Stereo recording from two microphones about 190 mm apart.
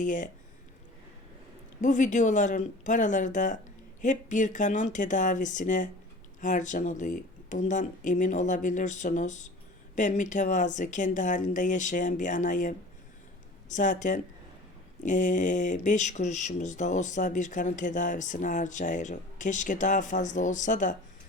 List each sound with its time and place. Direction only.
0.0 s speech: 40° left (ahead or behind)
1.8 s speech: 40° left (ahead or behind)